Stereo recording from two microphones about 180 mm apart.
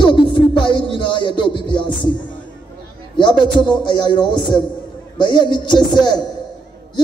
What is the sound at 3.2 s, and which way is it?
A man's voice, 25° left (ahead or behind).